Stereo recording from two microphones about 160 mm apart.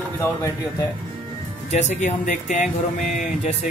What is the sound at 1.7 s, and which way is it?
Music, 50° left (ahead or behind).